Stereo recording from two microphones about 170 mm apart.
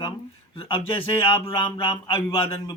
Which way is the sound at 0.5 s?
30° left (ahead or behind).